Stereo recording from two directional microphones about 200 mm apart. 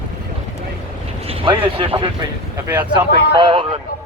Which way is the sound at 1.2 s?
30° right (ahead or behind).